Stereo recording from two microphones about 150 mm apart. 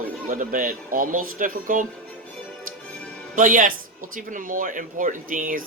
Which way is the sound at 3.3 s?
65° right (ahead or behind).